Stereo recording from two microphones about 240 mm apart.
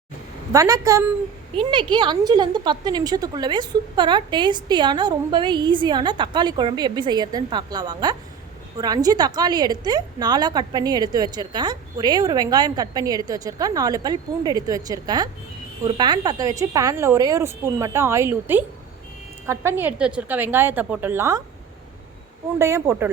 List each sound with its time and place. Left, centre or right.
0.5 s a woman's voice: centre
22.5 s a woman's voice: centre